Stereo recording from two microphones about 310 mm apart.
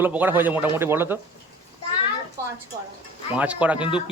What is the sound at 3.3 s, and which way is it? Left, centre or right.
Speech, centre.